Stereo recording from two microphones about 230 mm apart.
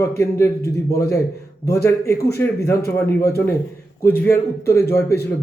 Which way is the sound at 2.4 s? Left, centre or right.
Centre.